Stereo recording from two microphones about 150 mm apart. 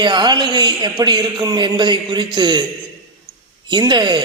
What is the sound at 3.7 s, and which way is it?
Speech, 30° right (ahead or behind).